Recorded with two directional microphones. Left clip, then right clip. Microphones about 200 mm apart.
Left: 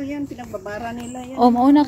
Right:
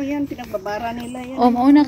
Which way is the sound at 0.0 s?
25° left (ahead or behind).